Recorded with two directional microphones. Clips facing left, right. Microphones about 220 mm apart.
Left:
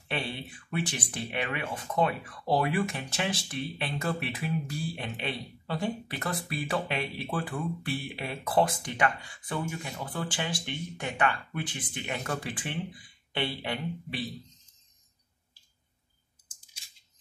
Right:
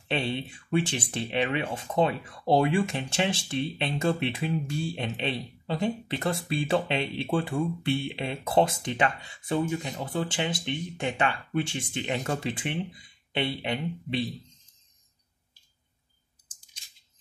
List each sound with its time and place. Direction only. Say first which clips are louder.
0.1 s speech: right 5 dB; 25° right (ahead or behind)
16.4 s scissors: even; 10° left (ahead or behind)